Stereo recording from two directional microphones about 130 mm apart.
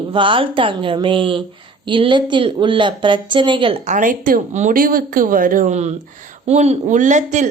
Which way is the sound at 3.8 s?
80° right.